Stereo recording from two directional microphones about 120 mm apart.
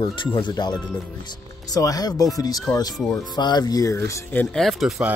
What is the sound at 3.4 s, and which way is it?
Speech, 35° left (ahead or behind).